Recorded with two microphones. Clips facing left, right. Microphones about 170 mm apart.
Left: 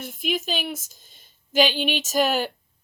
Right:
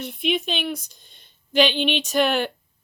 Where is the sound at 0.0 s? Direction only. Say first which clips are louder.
Right 3 dB; centre (ahead or behind).